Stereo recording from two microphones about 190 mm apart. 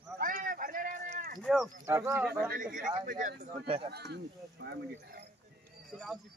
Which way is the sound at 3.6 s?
30° right (ahead or behind).